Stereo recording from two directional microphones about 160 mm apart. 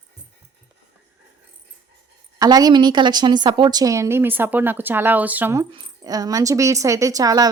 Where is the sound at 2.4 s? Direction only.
25° right (ahead or behind).